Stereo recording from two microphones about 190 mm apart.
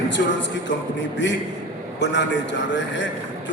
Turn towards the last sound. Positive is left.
turn(degrees=70)  # may be behind; listen again after turning